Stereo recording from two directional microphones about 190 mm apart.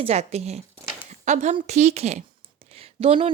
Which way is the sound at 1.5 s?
35° right (ahead or behind).